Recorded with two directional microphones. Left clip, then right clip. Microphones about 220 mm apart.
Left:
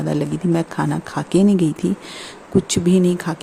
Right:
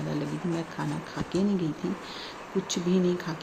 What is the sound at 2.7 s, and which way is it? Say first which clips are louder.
Speech: left 7 dB; 50° left (ahead or behind).